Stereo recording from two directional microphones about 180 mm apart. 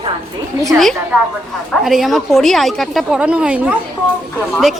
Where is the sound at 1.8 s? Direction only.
Centre (ahead or behind).